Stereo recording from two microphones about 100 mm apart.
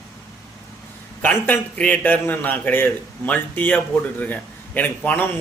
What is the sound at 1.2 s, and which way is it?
A man's voice, 15° left (ahead or behind).